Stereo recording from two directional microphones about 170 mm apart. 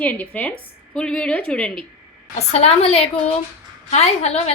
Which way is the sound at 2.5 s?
35° left (ahead or behind).